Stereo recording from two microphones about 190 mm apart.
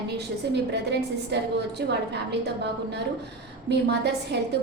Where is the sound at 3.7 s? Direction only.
60° right (ahead or behind).